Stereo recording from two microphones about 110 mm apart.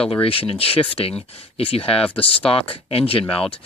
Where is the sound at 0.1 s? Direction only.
55° left (ahead or behind).